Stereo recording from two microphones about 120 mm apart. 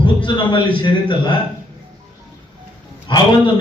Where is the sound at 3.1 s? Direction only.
40° left (ahead or behind).